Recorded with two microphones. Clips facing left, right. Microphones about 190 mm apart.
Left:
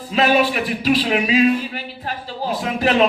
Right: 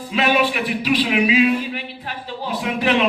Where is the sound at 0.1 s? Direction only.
35° left (ahead or behind).